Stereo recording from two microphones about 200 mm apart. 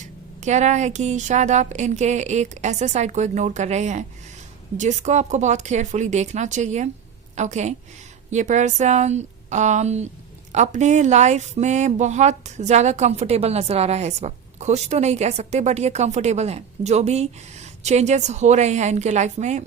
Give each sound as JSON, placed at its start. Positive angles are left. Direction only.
{"t": 0.0, "sound": "speech", "side_deg": -35}